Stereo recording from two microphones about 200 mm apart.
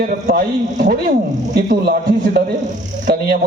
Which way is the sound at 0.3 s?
45° right (ahead or behind).